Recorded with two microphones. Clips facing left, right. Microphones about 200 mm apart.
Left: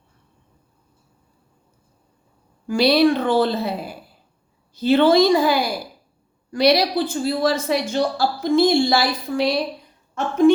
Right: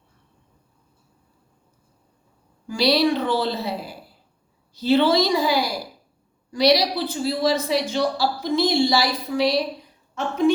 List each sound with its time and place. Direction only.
2.6 s speech: 55° left (ahead or behind)